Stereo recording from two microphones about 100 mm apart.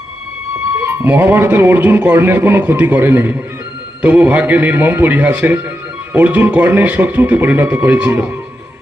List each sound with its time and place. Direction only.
0.8 s a man's voice: 20° right (ahead or behind)